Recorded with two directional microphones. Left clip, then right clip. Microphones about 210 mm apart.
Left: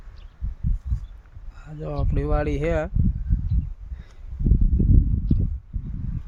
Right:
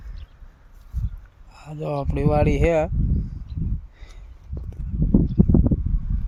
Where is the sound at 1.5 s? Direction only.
30° right (ahead or behind).